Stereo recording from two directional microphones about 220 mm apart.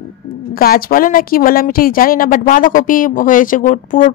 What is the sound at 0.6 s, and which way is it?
A woman's voice, 40° left (ahead or behind).